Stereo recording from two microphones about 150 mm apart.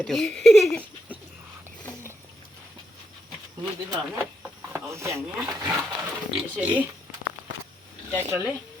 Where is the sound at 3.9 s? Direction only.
10° right (ahead or behind).